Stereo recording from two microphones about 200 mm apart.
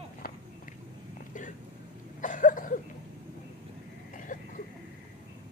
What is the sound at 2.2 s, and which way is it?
Cough, 40° left (ahead or behind).